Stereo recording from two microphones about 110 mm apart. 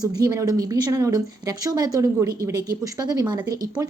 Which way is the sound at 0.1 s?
35° right (ahead or behind).